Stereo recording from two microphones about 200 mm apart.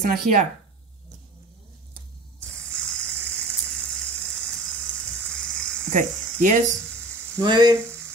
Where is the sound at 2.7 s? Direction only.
5° left (ahead or behind).